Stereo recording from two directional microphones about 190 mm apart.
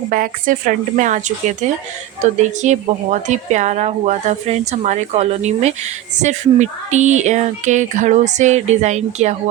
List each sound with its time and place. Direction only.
0.1 s a woman's voice: 45° right (ahead or behind)